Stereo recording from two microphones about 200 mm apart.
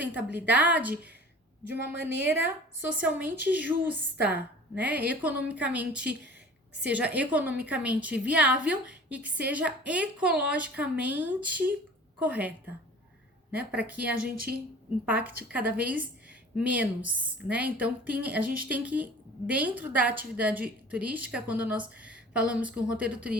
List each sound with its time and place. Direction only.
0.1 s a woman's voice: 10° right (ahead or behind)
2.2 s a woman's voice: 10° right (ahead or behind)
13.6 s a woman's voice: 5° right (ahead or behind)